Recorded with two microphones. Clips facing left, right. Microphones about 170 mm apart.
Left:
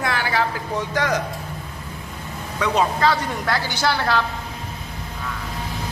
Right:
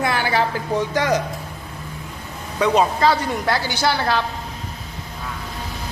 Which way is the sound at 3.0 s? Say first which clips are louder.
Right 2 dB; 15° right (ahead or behind).